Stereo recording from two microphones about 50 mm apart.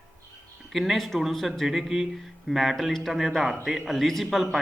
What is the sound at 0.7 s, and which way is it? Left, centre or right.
Speech, centre.